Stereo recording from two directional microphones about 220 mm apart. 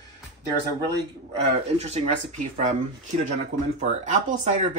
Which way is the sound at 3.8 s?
35° right (ahead or behind).